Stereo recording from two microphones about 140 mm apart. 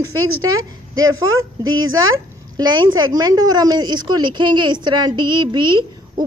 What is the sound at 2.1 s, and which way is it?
A woman's voice, 30° right (ahead or behind).